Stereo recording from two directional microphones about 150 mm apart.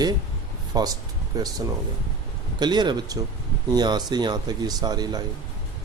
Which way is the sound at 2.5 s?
30° right (ahead or behind).